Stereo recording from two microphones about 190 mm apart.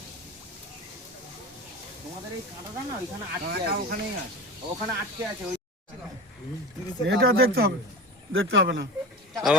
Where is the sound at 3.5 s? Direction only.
55° right (ahead or behind).